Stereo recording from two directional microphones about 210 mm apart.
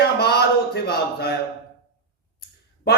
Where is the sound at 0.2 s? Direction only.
50° left (ahead or behind).